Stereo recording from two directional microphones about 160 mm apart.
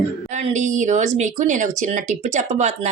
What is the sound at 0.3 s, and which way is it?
A woman's voice, 50° right (ahead or behind).